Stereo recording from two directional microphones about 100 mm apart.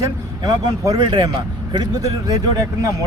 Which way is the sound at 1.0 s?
50° right (ahead or behind).